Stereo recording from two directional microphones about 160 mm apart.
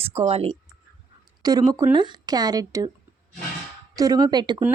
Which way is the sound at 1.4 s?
25° right (ahead or behind).